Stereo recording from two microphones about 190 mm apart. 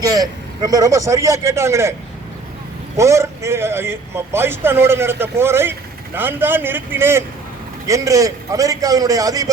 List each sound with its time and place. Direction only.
0.0 s a man's voice: 20° right (ahead or behind)
3.0 s a man's voice: 15° right (ahead or behind)